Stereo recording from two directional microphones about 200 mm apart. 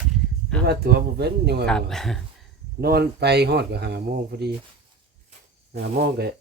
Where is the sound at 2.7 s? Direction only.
50° right (ahead or behind).